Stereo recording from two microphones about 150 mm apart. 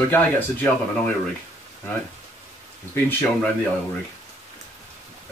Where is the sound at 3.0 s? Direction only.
10° left (ahead or behind).